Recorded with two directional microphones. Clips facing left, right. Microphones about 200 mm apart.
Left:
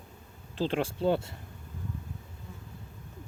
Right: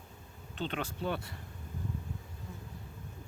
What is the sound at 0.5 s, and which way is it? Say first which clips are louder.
Speech: left 7 dB; 30° left (ahead or behind).